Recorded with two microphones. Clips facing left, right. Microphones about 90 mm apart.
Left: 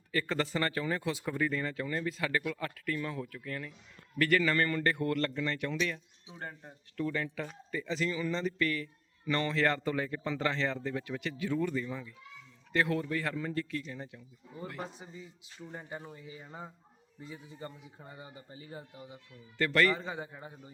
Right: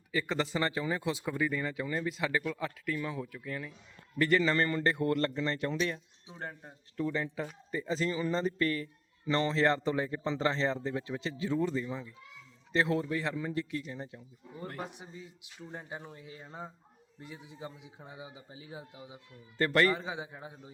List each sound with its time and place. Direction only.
0.1 s speech: 15° right (ahead or behind)
4.2 s a man's voice: 25° right (ahead or behind)
6.4 s a man's voice: 5° right (ahead or behind)
6.9 s a man's voice: 20° right (ahead or behind)
15.0 s a man's voice: centre (ahead or behind)
19.5 s a man's voice: 30° right (ahead or behind)
20.0 s a man's voice: centre (ahead or behind)